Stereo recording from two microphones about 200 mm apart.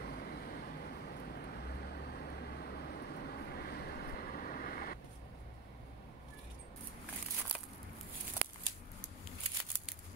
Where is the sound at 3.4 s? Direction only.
50° left (ahead or behind).